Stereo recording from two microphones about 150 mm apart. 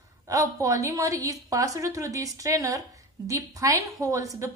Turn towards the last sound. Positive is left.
turn(degrees=-20)  # may be behind; listen again after turning